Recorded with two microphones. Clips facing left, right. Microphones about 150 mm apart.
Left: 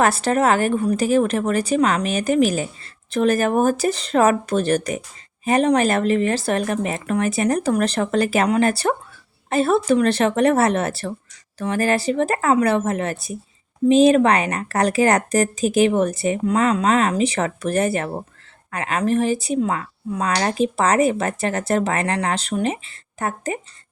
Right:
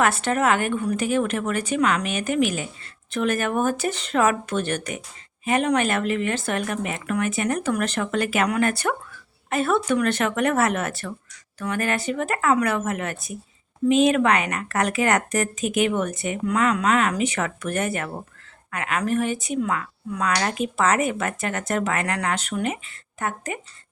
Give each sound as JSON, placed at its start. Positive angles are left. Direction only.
{"t": 0.0, "sound": "speech", "side_deg": 35}